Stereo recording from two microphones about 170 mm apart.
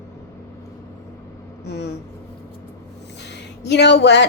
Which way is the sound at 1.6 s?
80° left.